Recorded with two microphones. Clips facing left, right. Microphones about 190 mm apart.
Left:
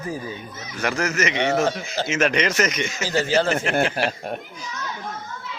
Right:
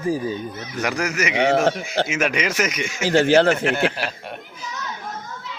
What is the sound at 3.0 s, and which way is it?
Speech, 75° right (ahead or behind).